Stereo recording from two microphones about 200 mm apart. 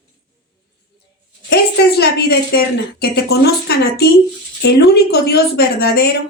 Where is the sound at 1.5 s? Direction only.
55° left (ahead or behind).